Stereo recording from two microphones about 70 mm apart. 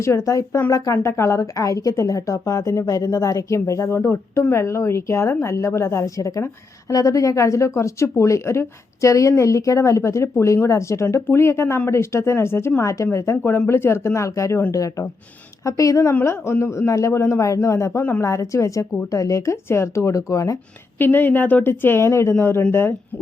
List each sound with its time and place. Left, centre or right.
0.3 s a woman's voice: left
16.2 s speech: left
21.0 s a woman's voice: left